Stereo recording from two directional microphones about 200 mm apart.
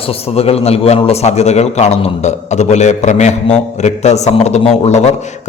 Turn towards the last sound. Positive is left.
turn(degrees=35)  # may be behind; listen again after turning